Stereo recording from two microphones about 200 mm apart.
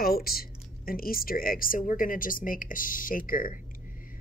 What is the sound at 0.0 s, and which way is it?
Speech, 50° left (ahead or behind).